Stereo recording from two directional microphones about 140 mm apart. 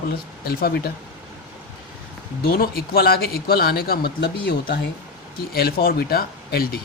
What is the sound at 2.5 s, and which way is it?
Speech, 90° left.